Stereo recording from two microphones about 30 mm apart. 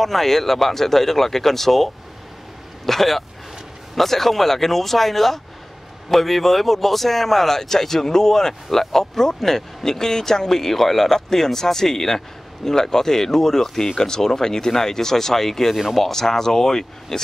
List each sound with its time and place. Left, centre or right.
0.0 s speech: centre
15.7 s speech: centre
16.0 s speech: centre